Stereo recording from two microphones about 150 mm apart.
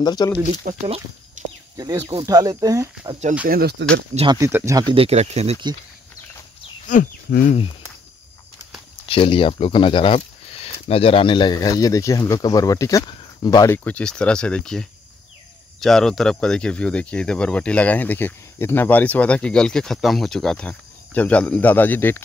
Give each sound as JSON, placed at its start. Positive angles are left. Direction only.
{"t": 0.0, "sound": "speech", "side_deg": 25}
{"t": 0.8, "sound": "speech", "side_deg": -40}
{"t": 1.8, "sound": "speech", "side_deg": -25}
{"t": 3.4, "sound": "speech", "side_deg": -90}
{"t": 4.5, "sound": "speech", "side_deg": -15}
{"t": 4.7, "sound": "speech", "side_deg": -35}
{"t": 6.9, "sound": "speech", "side_deg": 65}
{"t": 9.0, "sound": "speech", "side_deg": 35}
{"t": 13.8, "sound": "speech", "side_deg": 5}